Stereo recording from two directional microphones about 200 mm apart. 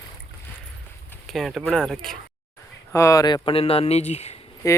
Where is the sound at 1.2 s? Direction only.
Centre (ahead or behind).